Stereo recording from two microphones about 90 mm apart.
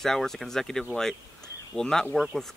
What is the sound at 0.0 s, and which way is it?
Speech, 5° left (ahead or behind).